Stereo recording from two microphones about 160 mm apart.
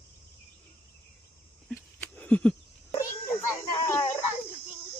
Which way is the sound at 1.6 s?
10° left (ahead or behind).